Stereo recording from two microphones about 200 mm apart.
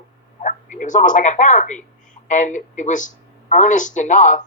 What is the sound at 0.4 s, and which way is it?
Speech, 40° left (ahead or behind).